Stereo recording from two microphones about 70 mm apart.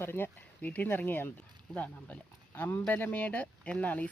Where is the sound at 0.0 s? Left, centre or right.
Left.